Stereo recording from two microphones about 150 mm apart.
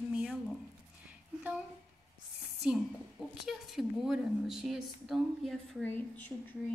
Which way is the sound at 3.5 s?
Centre (ahead or behind).